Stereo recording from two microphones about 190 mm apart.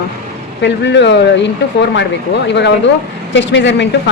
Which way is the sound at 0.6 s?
70° left (ahead or behind).